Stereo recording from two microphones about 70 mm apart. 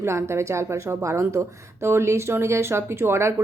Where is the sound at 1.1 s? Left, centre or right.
Right.